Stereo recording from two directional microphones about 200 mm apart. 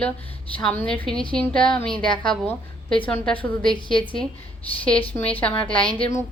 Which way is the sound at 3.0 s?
10° left (ahead or behind).